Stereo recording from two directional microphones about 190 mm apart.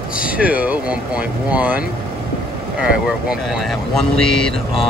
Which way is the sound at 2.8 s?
5° right (ahead or behind).